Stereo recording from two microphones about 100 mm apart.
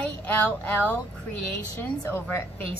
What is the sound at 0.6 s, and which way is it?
Speech, 15° left (ahead or behind).